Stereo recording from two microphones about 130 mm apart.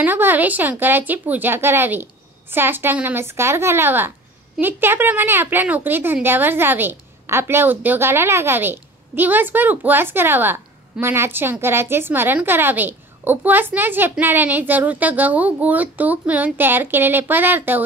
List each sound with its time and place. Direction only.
0.0 s a woman's voice: 15° right (ahead or behind)